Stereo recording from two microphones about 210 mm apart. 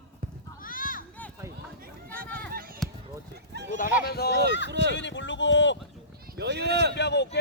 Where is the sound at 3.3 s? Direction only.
55° right (ahead or behind).